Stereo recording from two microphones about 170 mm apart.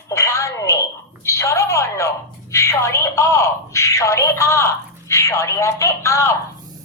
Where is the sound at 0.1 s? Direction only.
15° left (ahead or behind).